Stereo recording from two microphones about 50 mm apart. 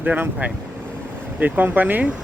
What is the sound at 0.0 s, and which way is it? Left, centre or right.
Speech, right.